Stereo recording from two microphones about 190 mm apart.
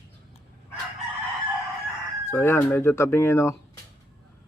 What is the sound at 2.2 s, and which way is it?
Speech, 15° left (ahead or behind).